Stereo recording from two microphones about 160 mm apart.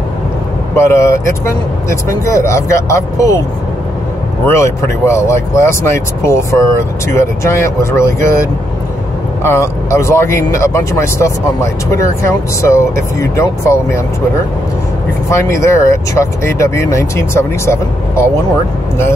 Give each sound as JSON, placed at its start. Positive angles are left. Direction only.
{"t": 0.7, "sound": "speech", "side_deg": 15}
{"t": 4.5, "sound": "speech", "side_deg": 15}
{"t": 9.4, "sound": "speech", "side_deg": 15}
{"t": 15.2, "sound": "speech", "side_deg": 20}